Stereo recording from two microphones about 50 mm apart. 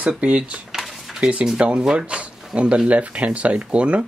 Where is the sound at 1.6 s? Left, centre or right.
Centre.